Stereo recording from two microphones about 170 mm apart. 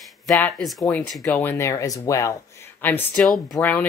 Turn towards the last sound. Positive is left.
turn(degrees=10)  # may be behind; listen again after turning